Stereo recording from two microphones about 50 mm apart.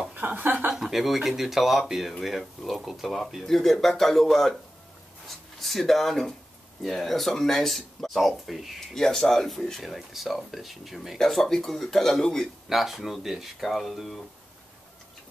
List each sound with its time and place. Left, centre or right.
0.4 s a woman's voice: right
0.7 s speech: centre
5.6 s speech: centre
12.6 s speech: centre